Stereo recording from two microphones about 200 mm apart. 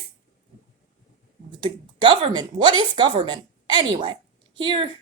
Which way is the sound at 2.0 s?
25° right (ahead or behind).